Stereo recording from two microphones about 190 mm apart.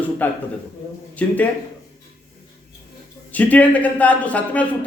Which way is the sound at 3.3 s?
10° left (ahead or behind).